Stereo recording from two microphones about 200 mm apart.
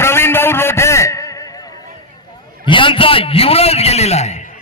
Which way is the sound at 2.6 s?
25° left (ahead or behind).